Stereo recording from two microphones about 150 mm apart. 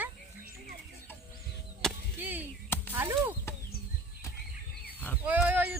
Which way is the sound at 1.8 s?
5° left (ahead or behind).